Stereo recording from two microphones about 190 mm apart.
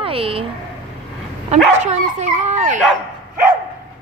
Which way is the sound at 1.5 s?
35° right (ahead or behind).